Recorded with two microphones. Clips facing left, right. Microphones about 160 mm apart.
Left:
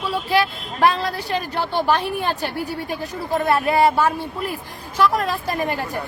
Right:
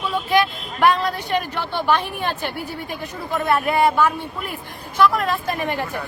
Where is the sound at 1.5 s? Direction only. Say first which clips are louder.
Left 4 dB; 35° left (ahead or behind).